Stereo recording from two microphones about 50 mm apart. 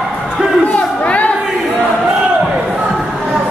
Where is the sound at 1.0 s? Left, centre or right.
Left.